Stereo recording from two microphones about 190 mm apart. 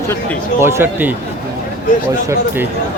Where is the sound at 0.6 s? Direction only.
10° right (ahead or behind).